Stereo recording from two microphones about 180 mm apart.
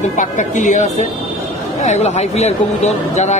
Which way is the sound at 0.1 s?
45° left (ahead or behind).